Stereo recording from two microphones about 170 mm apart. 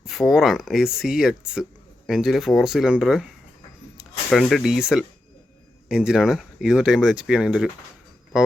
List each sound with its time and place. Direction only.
0.0 s speech: centre (ahead or behind)